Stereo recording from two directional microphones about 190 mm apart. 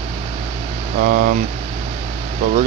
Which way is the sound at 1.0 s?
45° right (ahead or behind).